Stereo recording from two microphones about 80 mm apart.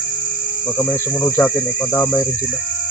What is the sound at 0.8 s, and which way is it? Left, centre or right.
Speech, left.